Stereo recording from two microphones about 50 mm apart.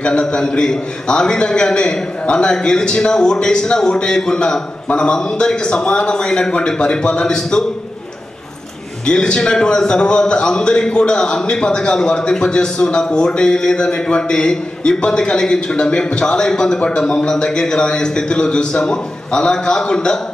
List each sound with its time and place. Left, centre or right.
0.0 s a man's voice: centre
9.0 s a man's voice: centre